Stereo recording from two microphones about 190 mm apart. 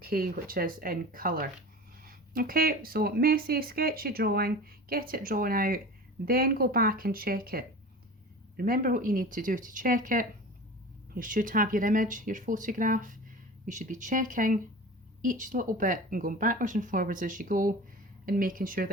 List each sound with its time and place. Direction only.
0.0 s speech: 50° right (ahead or behind)